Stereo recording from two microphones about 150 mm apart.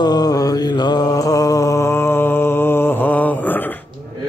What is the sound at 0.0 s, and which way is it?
Mantra, 25° left (ahead or behind).